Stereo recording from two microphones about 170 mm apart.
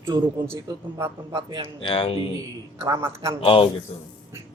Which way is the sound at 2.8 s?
20° right (ahead or behind).